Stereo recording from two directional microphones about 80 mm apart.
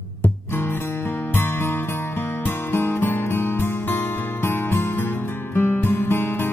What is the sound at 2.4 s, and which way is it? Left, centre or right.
Music, left.